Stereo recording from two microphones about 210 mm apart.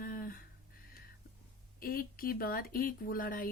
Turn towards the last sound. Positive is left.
turn(degrees=45)  # may be behind; listen again after turning